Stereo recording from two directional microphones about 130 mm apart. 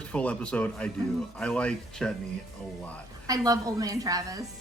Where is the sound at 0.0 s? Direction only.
10° left (ahead or behind).